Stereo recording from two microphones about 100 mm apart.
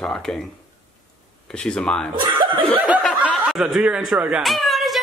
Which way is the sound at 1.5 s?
10° left (ahead or behind).